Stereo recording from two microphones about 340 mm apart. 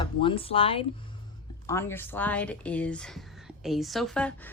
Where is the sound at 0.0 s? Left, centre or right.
Centre.